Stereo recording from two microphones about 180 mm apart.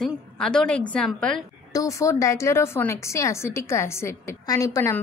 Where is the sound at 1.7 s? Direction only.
20° left (ahead or behind).